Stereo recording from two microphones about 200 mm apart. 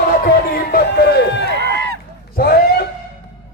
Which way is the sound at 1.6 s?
55° right (ahead or behind).